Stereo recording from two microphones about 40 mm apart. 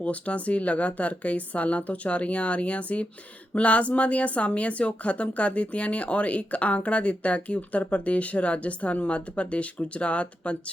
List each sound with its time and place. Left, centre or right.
0.0 s speech: left